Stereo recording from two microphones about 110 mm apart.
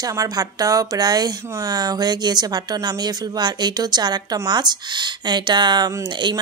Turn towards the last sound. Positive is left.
turn(degrees=-45)  # may be behind; listen again after turning